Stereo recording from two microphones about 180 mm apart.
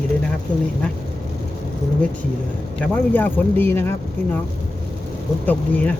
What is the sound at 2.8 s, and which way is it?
Speech, 10° left (ahead or behind).